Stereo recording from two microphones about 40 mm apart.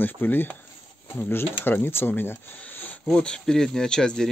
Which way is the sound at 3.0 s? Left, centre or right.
Left.